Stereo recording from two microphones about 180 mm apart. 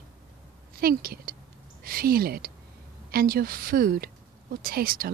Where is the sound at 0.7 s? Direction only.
55° right (ahead or behind).